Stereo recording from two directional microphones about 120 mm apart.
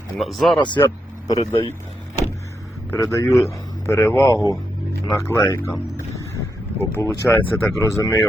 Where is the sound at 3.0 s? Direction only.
30° left (ahead or behind).